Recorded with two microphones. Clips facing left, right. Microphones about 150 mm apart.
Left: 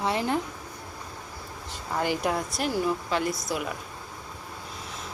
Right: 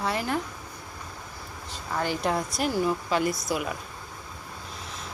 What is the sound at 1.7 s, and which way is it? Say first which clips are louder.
Speech: left 1 dB; 15° left (ahead or behind).